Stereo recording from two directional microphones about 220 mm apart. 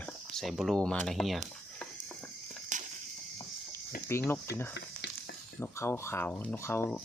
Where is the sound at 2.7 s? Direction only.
35° right (ahead or behind).